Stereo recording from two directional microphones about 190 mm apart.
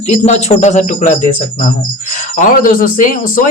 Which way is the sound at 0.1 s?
35° left (ahead or behind).